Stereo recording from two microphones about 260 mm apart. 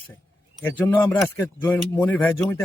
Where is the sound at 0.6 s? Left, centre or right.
Centre.